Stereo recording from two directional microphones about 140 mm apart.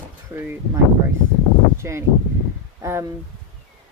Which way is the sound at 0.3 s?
15° right (ahead or behind).